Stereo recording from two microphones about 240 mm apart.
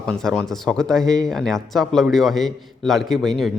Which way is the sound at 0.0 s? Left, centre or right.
Centre.